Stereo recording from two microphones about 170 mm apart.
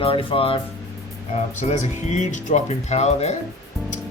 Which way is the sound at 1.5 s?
45° left (ahead or behind).